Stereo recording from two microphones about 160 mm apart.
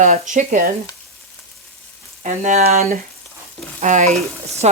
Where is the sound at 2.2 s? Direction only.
50° right (ahead or behind).